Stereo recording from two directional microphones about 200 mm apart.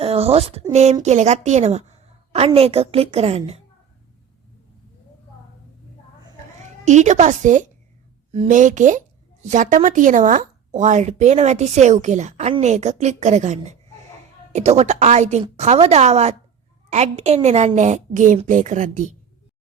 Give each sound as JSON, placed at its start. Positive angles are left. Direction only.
{"t": 0.0, "sound": "speech", "side_deg": -30}
{"t": 6.8, "sound": "speech", "side_deg": -35}